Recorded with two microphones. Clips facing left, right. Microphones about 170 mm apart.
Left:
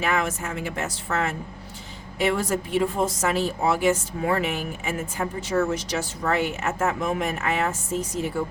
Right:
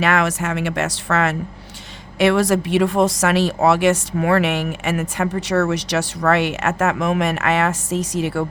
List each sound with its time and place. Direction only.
0.0 s a woman's voice: 80° right